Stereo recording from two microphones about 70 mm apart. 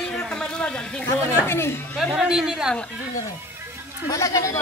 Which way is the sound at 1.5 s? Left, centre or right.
Left.